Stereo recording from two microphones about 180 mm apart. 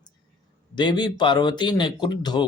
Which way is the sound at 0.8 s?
25° left (ahead or behind).